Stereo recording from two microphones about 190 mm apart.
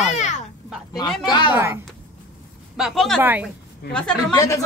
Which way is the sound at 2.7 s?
Centre (ahead or behind).